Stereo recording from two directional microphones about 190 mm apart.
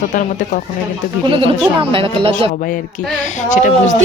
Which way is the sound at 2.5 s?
45° left (ahead or behind).